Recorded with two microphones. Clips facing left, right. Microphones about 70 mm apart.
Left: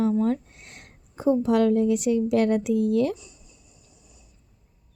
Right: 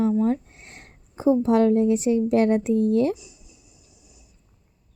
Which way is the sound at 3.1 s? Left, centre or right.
Centre.